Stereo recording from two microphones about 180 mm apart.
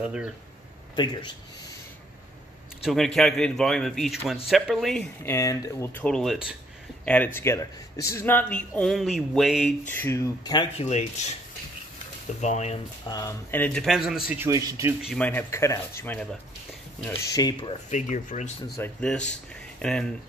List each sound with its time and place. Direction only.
0.0 s speech: 5° right (ahead or behind)
0.9 s speech: 25° left (ahead or behind)
2.8 s speech: centre (ahead or behind)
5.2 s speech: 15° left (ahead or behind)
6.0 s speech: centre (ahead or behind)
7.1 s speech: 10° left (ahead or behind)
9.8 s speech: 15° left (ahead or behind)
10.9 s speech: 40° left (ahead or behind)
12.4 s speech: 40° left (ahead or behind)
13.1 s speech: 15° left (ahead or behind); by 15.0 s 15° right (ahead or behind)
15.0 s speech: centre (ahead or behind)
15.2 s speech: 15° left (ahead or behind)
17.8 s speech: 40° left (ahead or behind)
18.8 s speech: 5° left (ahead or behind)